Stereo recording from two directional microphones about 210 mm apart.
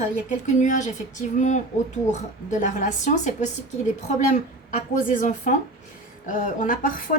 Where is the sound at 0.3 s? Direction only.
35° left (ahead or behind).